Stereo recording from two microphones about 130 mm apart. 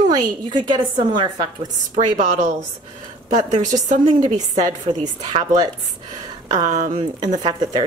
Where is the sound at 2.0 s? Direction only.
70° right (ahead or behind).